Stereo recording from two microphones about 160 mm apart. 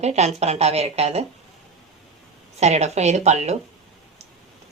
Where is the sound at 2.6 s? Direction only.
45° right (ahead or behind).